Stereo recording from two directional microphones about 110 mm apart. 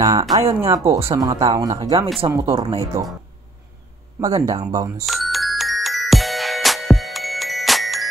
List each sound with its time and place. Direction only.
0.0 s speech: 35° right (ahead or behind)
4.2 s speech: 30° right (ahead or behind)
5.0 s music: centre (ahead or behind)